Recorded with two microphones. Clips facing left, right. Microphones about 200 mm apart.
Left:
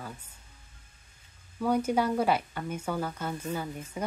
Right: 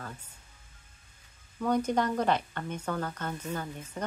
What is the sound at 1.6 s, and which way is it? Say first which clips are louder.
Speech: left 1 dB; 10° left (ahead or behind).